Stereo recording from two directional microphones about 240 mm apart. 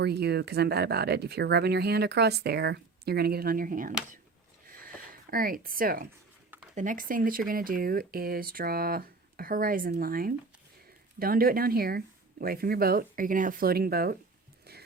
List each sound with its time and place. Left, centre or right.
0.0 s speech: right
5.3 s speech: right